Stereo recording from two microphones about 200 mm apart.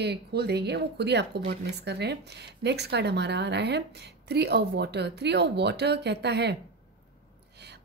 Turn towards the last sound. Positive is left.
turn(degrees=-55)  # may be behind; listen again after turning